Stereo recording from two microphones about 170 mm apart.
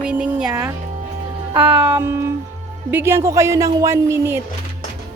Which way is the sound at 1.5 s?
30° right (ahead or behind).